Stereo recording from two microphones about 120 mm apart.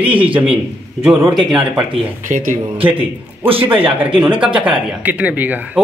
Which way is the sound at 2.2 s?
90° right.